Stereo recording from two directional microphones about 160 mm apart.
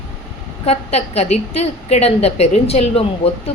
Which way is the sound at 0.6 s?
40° left (ahead or behind).